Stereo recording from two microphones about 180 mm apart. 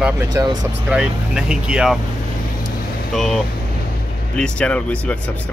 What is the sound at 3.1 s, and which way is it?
Speech, centre (ahead or behind).